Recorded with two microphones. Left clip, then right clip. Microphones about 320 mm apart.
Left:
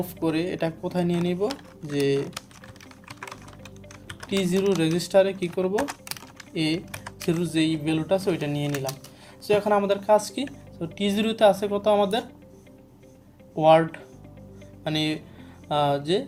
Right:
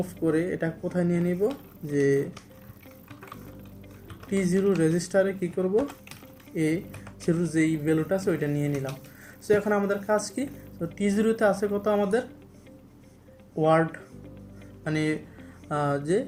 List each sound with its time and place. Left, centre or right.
0.3 s a woman's voice: left
4.3 s a woman's voice: left
13.6 s a woman's voice: left